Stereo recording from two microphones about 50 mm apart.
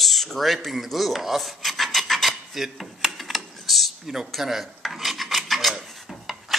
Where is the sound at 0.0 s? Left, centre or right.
Centre.